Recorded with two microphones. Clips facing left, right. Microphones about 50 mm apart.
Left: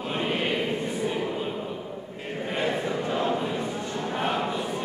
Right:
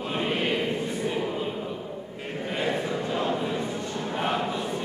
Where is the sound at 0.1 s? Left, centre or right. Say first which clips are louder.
Even; centre.